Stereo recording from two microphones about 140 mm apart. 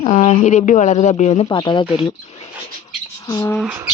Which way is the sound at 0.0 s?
45° left (ahead or behind).